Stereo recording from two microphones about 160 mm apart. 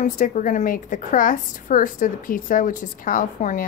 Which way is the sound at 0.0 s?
55° left (ahead or behind).